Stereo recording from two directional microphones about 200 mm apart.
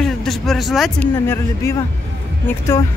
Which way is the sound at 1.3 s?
15° left (ahead or behind).